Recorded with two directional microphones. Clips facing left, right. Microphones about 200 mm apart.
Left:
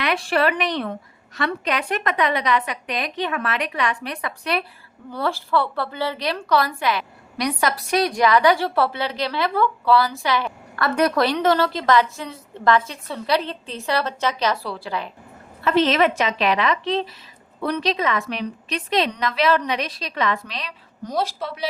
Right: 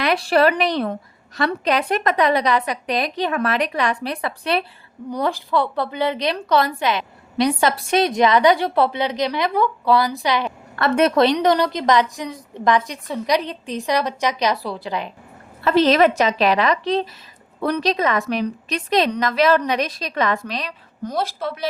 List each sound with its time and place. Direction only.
0.0 s a woman's voice: 35° right (ahead or behind)
5.1 s a woman's voice: 15° right (ahead or behind)
15.6 s a woman's voice: 40° right (ahead or behind)